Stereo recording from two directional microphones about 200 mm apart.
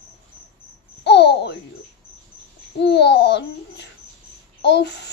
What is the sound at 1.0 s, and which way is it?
Babbling, 60° left (ahead or behind).